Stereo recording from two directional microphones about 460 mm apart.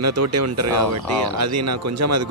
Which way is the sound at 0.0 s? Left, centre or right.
Right.